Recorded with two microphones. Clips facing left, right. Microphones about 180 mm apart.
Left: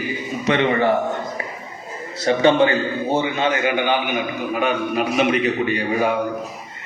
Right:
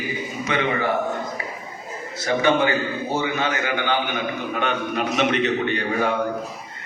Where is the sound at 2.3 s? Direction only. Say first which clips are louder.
Left 4 dB; 30° left (ahead or behind); by 6.1 s 10° left (ahead or behind).